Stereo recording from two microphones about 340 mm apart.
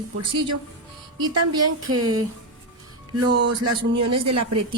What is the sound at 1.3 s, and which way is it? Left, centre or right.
Speech, right.